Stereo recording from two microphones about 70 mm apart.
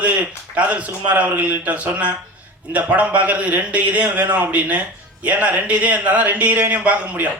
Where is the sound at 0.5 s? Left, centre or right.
Centre.